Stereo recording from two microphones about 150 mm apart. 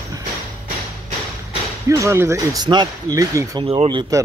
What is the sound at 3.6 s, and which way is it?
Speech, 35° right (ahead or behind).